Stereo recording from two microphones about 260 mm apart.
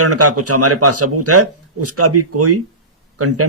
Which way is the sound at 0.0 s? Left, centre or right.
Right.